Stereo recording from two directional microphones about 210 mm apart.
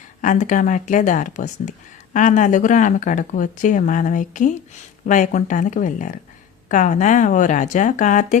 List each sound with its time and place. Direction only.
0.2 s speech: 35° left (ahead or behind)